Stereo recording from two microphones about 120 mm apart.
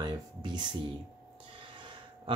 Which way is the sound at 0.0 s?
40° right (ahead or behind).